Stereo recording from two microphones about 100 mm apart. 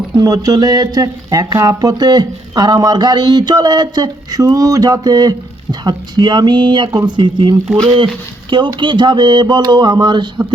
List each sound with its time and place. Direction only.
0.2 s speech: 35° right (ahead or behind)